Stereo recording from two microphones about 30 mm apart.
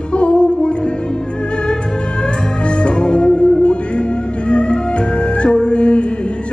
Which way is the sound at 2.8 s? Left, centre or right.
Left.